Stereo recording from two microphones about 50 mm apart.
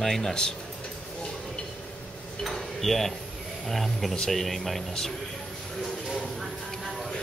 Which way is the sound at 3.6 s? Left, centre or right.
Centre.